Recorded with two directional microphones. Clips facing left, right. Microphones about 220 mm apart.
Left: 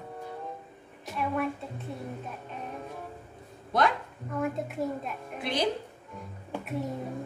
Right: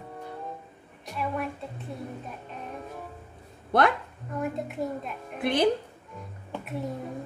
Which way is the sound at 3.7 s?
60° right (ahead or behind).